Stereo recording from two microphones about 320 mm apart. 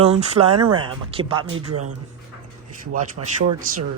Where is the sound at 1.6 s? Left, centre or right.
Right.